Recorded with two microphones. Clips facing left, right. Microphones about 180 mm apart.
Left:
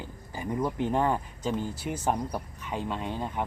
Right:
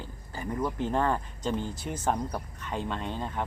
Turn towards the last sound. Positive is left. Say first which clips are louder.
# left 1 dB
turn(degrees=10)  # may be behind; listen again after turning